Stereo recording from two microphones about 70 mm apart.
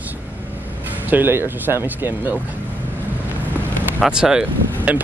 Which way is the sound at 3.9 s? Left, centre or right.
Centre.